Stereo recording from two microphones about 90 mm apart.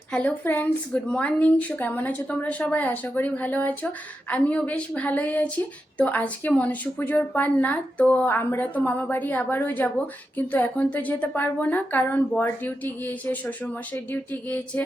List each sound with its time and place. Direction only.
0.1 s a woman's voice: 15° left (ahead or behind)